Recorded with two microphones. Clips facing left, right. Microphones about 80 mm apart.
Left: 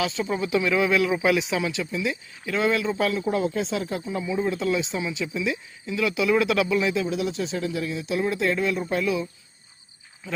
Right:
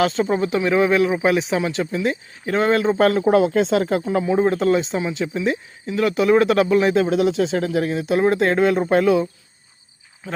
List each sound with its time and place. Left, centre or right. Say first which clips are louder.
0.0 s speech: right 7 dB; right
3.0 s speech: right 8 dB; right